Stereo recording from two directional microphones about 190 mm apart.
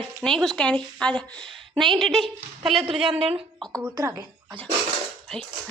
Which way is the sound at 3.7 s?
15° right (ahead or behind).